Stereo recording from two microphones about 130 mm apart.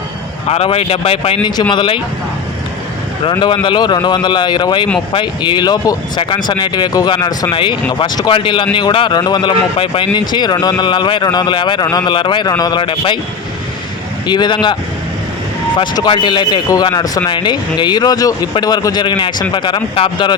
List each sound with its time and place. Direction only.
0.4 s speech: 50° left (ahead or behind)
3.4 s speech: 40° left (ahead or behind)
14.3 s speech: 35° left (ahead or behind)